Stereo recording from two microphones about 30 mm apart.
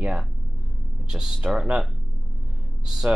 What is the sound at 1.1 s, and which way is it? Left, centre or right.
Speech, centre.